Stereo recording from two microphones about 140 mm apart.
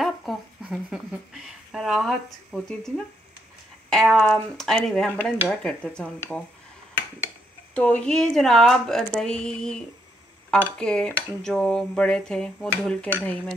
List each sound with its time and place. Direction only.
0.0 s speech: centre (ahead or behind)
3.9 s speech: centre (ahead or behind)
7.7 s speech: 10° left (ahead or behind)